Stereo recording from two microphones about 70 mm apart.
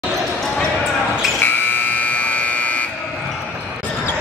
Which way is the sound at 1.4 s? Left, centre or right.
Left.